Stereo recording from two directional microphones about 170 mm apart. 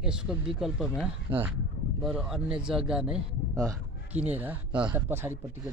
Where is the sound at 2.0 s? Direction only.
5° right (ahead or behind).